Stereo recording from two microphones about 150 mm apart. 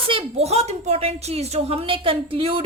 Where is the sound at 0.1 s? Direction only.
40° right (ahead or behind).